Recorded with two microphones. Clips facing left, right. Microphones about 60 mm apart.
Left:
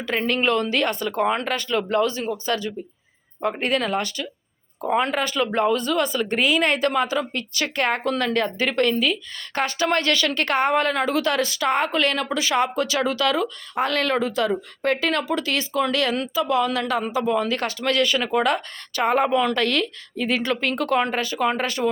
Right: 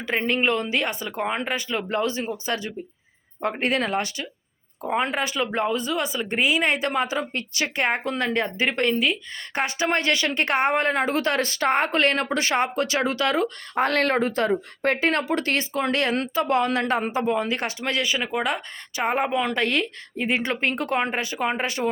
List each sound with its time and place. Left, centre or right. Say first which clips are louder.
0.0 s speech: left 1 dB; right
1.9 s speech: left 2 dB; right
13.7 s speech: right 1 dB; right
17.3 s speech: left 2 dB; right